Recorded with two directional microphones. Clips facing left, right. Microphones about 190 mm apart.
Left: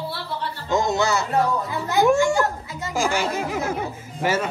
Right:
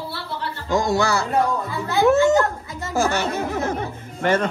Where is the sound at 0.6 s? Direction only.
20° left (ahead or behind).